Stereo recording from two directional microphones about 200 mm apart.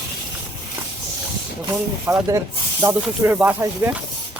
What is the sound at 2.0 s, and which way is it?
Speech, 10° right (ahead or behind).